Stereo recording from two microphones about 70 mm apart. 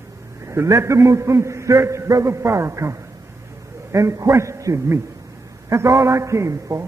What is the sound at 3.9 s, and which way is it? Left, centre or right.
A man's voice, right.